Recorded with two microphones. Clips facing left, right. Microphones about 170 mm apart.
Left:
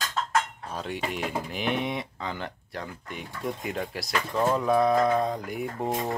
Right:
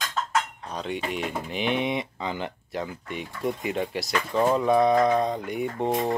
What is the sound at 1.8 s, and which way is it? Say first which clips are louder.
Speech: right 3 dB; 20° right (ahead or behind).